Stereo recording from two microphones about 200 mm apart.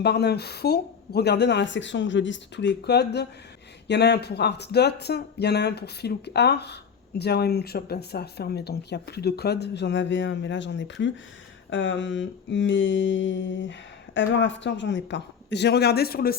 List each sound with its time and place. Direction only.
0.0 s mantra: 55° left (ahead or behind)